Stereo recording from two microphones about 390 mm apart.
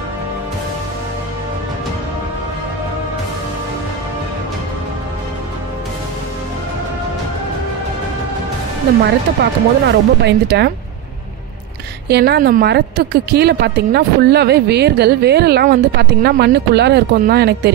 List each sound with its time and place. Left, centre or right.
9.4 s a woman's voice: right
12.1 s a woman's voice: right